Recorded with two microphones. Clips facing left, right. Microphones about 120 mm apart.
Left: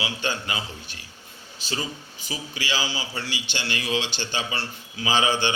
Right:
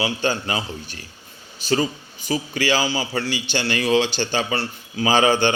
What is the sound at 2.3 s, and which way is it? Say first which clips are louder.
A man's voice: right 10 dB; 50° right (ahead or behind).